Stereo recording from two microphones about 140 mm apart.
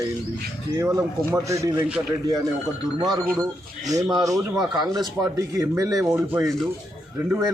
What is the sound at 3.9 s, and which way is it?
Speech, 25° right (ahead or behind).